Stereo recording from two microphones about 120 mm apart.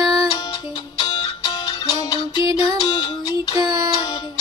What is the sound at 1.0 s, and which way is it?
Music, 35° left (ahead or behind).